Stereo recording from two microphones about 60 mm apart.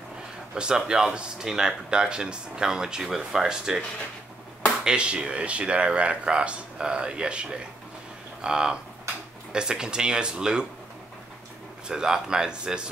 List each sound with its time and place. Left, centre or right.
0.6 s speech: centre
4.8 s speech: centre
11.9 s speech: centre